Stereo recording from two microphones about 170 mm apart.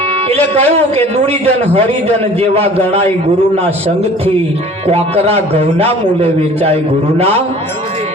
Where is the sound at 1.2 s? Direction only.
35° right (ahead or behind).